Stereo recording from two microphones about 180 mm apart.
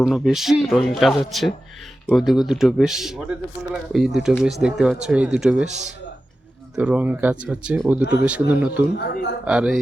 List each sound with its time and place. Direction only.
0.0 s speech: centre (ahead or behind)
6.7 s speech: 5° right (ahead or behind)
9.0 s a man's voice: 70° left (ahead or behind)
9.4 s speech: 5° right (ahead or behind)